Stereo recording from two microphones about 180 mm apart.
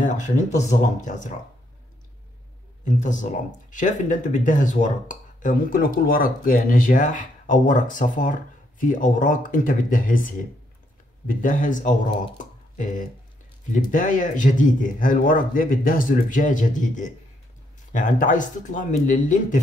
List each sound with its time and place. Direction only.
0.0 s speech: 45° left (ahead or behind)
2.8 s speech: 45° left (ahead or behind)